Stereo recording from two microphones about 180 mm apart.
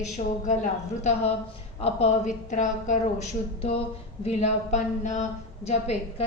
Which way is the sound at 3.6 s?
35° left (ahead or behind).